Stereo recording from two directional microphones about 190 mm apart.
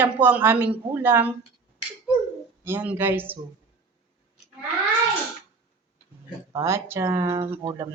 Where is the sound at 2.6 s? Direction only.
10° right (ahead or behind).